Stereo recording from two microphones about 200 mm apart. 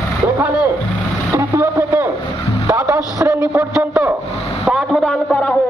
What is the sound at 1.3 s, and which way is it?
Vehicle, 10° right (ahead or behind).